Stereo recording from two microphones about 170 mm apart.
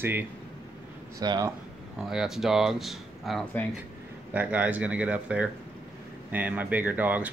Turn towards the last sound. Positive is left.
turn(degrees=-10)  # may be behind; listen again after turning